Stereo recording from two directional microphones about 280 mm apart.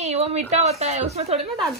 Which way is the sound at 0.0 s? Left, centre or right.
Right.